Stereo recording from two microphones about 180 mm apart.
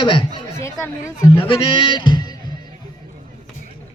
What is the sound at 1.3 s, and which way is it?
Speech, 30° left (ahead or behind).